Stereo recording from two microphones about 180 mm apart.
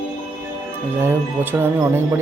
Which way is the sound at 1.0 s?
10° right (ahead or behind).